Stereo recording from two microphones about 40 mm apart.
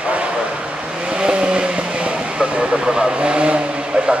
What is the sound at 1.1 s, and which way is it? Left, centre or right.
Speech, right.